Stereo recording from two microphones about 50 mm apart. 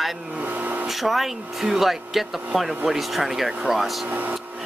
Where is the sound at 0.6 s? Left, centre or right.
Right.